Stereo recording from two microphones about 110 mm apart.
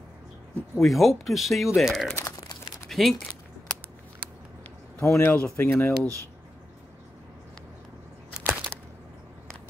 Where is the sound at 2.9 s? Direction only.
Centre (ahead or behind).